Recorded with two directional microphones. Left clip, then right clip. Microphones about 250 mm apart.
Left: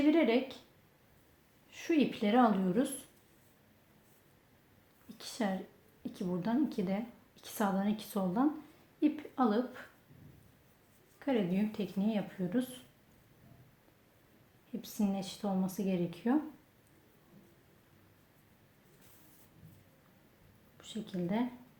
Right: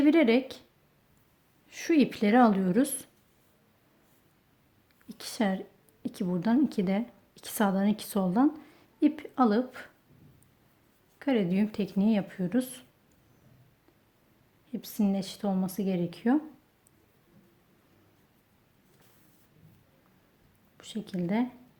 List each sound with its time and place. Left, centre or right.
0.0 s a woman's voice: right
1.7 s a woman's voice: right
5.0 s a woman's voice: right
11.2 s a woman's voice: right
14.7 s a woman's voice: right
20.7 s a woman's voice: right